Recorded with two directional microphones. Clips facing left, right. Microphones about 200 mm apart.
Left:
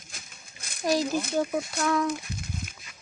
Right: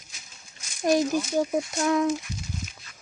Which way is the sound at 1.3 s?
15° right (ahead or behind).